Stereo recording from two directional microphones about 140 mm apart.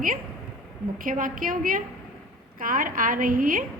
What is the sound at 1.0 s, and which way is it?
A woman's voice, 80° right.